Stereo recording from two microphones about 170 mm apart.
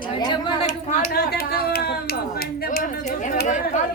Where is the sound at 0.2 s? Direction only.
25° left (ahead or behind).